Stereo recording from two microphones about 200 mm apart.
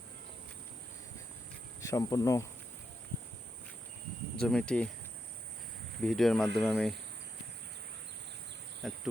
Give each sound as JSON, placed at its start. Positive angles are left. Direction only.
{"t": 1.8, "sound": "speech", "side_deg": 15}
{"t": 4.4, "sound": "speech", "side_deg": 5}
{"t": 6.0, "sound": "speech", "side_deg": 0}
{"t": 8.8, "sound": "insect", "side_deg": 0}